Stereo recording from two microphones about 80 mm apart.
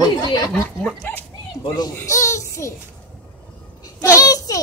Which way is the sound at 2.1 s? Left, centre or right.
Left.